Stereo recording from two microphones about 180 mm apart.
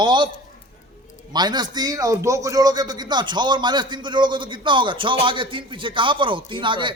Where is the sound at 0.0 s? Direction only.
25° right (ahead or behind).